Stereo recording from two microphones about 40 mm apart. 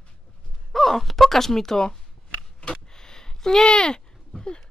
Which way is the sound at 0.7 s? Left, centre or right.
Centre.